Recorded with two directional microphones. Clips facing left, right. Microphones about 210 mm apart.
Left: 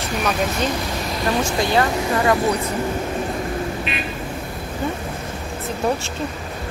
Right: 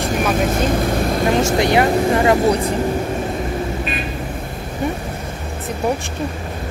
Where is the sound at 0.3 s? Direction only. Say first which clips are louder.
Right 3 dB; 50° right (ahead or behind).